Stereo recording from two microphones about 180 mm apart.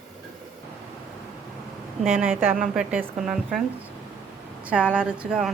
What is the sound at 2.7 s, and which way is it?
Speech, 5° right (ahead or behind).